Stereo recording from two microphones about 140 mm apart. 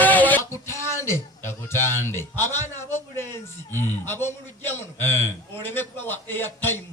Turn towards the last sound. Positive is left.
turn(degrees=15)  # may be behind; listen again after turning